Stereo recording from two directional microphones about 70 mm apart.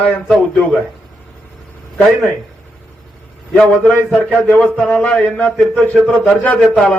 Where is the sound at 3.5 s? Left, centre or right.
Centre.